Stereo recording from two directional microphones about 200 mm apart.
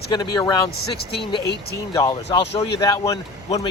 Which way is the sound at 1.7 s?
15° left (ahead or behind).